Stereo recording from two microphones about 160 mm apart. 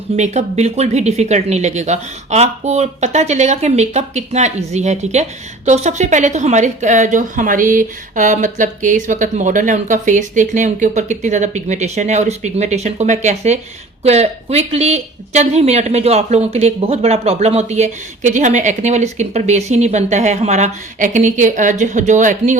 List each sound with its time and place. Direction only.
0.2 s speech: 45° right (ahead or behind)